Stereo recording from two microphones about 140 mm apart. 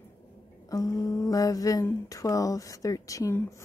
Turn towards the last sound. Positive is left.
turn(degrees=25)  # may be behind; listen again after turning